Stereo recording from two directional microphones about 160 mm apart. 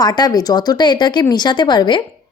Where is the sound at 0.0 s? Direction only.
25° left (ahead or behind).